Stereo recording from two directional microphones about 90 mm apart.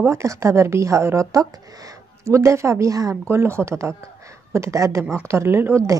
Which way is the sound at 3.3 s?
30° right (ahead or behind).